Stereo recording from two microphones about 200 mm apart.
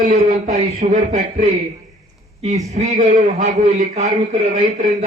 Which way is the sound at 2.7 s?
35° right (ahead or behind).